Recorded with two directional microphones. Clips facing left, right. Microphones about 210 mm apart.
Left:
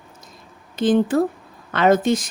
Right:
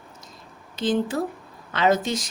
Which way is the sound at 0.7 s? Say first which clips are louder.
Left 6 dB; 55° left (ahead or behind).